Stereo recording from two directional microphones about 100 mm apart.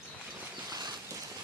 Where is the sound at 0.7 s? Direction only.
45° right (ahead or behind).